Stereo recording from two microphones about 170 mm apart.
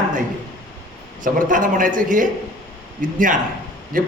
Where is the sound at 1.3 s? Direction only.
50° right (ahead or behind).